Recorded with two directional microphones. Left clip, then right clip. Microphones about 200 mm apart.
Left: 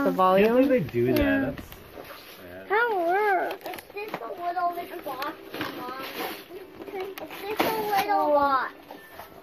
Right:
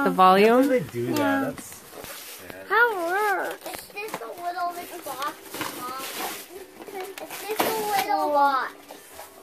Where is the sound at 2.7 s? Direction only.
25° right (ahead or behind).